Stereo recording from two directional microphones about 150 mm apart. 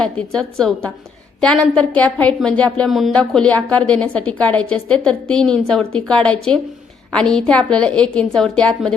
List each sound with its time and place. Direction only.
0.0 s a woman's voice: 5° left (ahead or behind)